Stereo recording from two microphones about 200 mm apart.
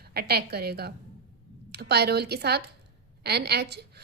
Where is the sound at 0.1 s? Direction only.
50° right (ahead or behind).